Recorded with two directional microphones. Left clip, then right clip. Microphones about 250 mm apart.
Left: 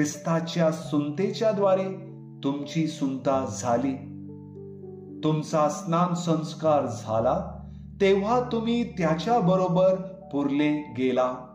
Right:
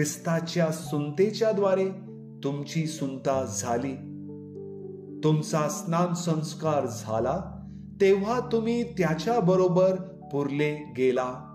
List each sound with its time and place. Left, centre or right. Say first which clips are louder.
0.0 s speech: left 2 dB; right
5.2 s speech: left 2 dB; right